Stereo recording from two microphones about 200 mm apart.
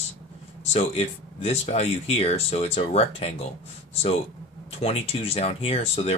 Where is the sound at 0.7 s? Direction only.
30° left (ahead or behind).